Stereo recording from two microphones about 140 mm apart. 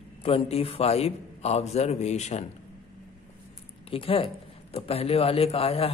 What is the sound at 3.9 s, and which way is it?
A man's voice, 40° left (ahead or behind).